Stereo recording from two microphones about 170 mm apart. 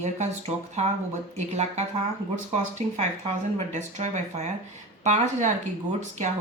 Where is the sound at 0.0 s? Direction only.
40° right (ahead or behind).